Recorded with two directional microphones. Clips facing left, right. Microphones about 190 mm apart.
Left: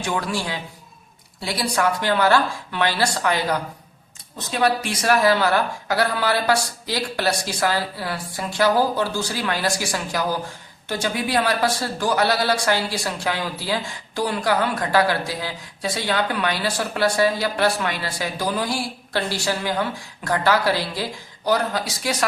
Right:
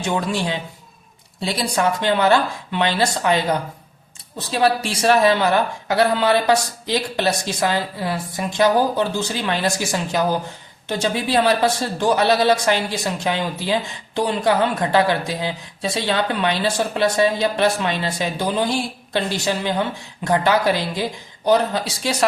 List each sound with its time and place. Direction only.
0.0 s speech: 25° right (ahead or behind)
4.4 s speech: 30° right (ahead or behind)